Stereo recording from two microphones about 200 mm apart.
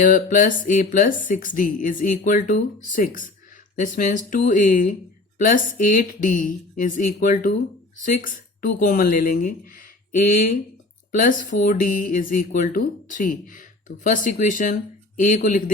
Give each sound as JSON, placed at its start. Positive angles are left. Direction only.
{"t": 0.0, "sound": "speech", "side_deg": 40}
{"t": 11.1, "sound": "speech", "side_deg": 40}